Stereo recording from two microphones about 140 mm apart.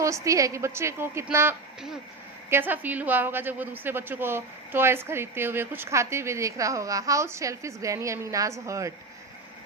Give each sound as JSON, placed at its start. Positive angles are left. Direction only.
{"t": 0.0, "sound": "a woman's voice", "side_deg": -20}